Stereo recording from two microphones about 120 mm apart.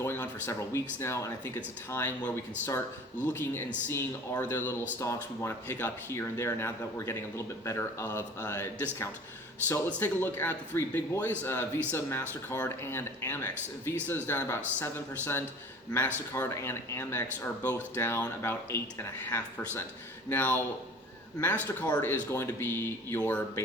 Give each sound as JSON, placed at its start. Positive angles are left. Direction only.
{"t": 0.0, "sound": "speech", "side_deg": 20}